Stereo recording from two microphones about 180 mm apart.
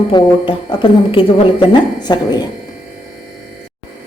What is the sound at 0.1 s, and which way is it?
A woman's voice, 25° left (ahead or behind).